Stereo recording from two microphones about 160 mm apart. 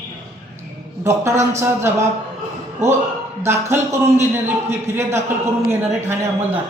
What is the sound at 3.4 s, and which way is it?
Speech, 15° right (ahead or behind).